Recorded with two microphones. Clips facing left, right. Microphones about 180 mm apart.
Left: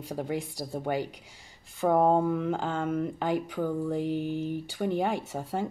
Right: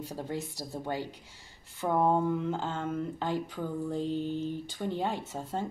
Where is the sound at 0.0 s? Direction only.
15° left (ahead or behind).